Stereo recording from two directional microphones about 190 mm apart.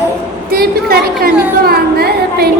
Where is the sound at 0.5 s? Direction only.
55° right (ahead or behind).